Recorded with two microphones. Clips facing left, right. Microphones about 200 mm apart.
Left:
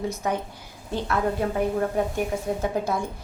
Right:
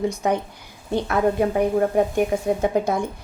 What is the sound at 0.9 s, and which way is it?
Speech, 15° right (ahead or behind).